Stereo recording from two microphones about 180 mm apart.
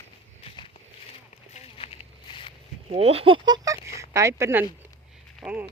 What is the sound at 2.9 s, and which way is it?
Speech, 35° right (ahead or behind).